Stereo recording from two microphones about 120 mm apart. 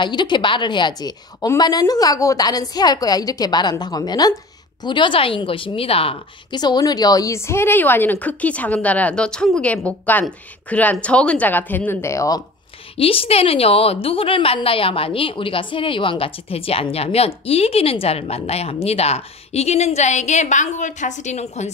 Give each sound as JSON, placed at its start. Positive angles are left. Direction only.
{"t": 0.0, "sound": "a woman's voice", "side_deg": 40}
{"t": 6.5, "sound": "a woman's voice", "side_deg": 35}
{"t": 12.9, "sound": "a woman's voice", "side_deg": 50}